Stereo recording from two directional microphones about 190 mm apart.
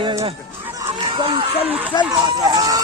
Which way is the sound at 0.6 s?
20° right (ahead or behind).